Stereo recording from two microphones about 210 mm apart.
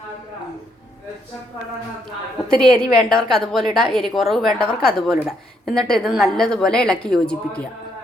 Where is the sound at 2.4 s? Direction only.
5° left (ahead or behind).